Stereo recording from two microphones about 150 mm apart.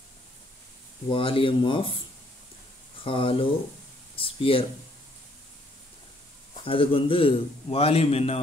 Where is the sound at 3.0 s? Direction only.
35° left (ahead or behind).